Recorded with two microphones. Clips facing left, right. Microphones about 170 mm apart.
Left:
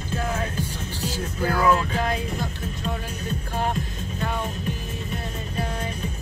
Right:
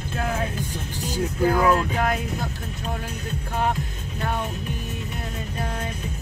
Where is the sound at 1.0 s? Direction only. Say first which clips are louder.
Right 5 dB; 15° right (ahead or behind).